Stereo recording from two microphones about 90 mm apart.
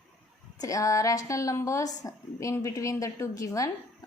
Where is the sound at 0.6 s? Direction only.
40° left (ahead or behind).